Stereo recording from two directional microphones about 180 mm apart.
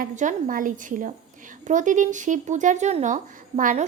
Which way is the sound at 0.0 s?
45° right (ahead or behind).